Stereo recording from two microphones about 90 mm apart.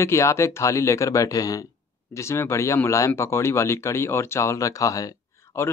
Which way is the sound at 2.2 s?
30° left (ahead or behind).